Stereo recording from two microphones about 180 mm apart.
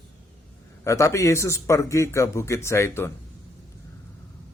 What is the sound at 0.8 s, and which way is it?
Speech, 15° left (ahead or behind).